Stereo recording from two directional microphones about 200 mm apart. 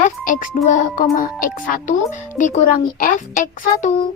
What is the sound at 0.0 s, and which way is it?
A child's voice, 40° left (ahead or behind).